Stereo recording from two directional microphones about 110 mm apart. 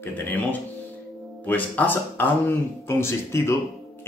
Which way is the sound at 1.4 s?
15° left (ahead or behind).